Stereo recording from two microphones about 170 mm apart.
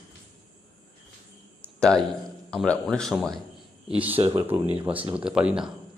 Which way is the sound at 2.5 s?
Centre (ahead or behind).